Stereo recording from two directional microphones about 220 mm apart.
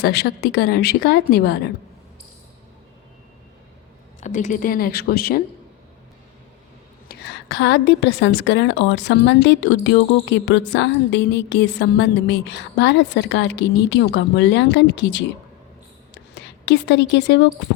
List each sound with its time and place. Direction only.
0.0 s a woman's voice: 45° left (ahead or behind)
4.2 s speech: 35° left (ahead or behind)
7.1 s a woman's voice: 50° left (ahead or behind)
16.1 s a sound: 50° left (ahead or behind)